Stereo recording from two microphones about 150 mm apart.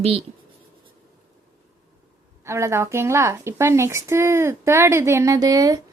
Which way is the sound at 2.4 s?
20° right (ahead or behind).